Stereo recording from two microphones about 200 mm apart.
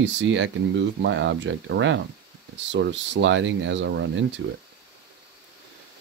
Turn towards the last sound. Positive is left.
turn(degrees=-60)  # may be behind; listen again after turning